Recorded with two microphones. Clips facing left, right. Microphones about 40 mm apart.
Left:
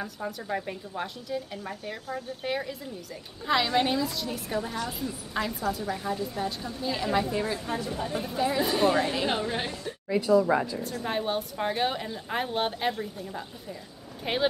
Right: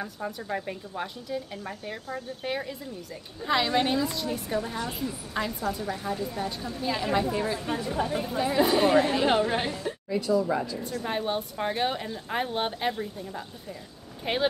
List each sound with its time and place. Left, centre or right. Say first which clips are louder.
0.0 s a woman's voice: even; centre
9.4 s a woman's voice: right 4 dB; right
10.1 s a woman's voice: left 3 dB; centre
10.4 s a woman's voice: left 3 dB; left
10.8 s speech: even; centre